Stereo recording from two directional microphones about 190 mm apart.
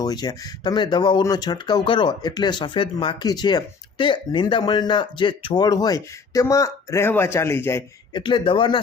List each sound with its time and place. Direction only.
0.0 s speech: 20° left (ahead or behind)
8.1 s speech: 25° left (ahead or behind)